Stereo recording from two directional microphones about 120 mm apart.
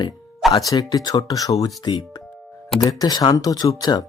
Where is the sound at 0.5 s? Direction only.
30° left (ahead or behind).